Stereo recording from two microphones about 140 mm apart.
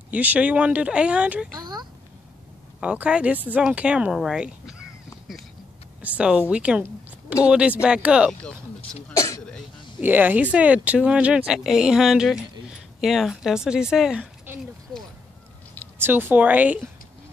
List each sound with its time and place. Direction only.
0.1 s speech: 10° right (ahead or behind)
1.6 s a sound: 30° right (ahead or behind)
2.8 s speech: 5° right (ahead or behind)
6.0 s speech: 10° right (ahead or behind)
6.8 s a sound: 10° right (ahead or behind)
7.4 s speech: 10° right (ahead or behind)
8.3 s speech: 5° left (ahead or behind)
9.1 s throat clearing: 20° left (ahead or behind)
10.0 s speech: 15° right (ahead or behind)
16.0 s speech: 15° right (ahead or behind)